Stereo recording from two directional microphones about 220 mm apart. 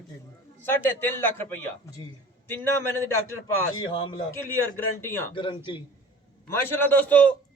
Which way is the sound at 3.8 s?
20° left (ahead or behind).